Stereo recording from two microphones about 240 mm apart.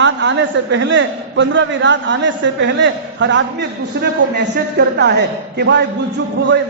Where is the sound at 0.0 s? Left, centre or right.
Right.